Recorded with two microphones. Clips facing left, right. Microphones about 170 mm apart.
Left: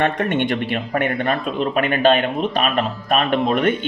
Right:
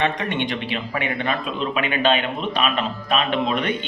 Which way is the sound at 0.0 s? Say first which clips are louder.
Left 4 dB; 50° left (ahead or behind).